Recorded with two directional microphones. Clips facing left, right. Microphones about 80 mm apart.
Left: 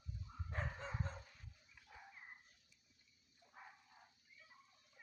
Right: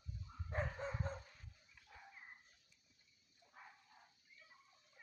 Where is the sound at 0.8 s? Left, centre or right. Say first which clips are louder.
Right 3 dB; centre.